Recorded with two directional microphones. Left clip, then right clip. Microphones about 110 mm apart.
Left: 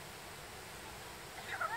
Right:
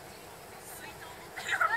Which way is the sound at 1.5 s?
5° right (ahead or behind).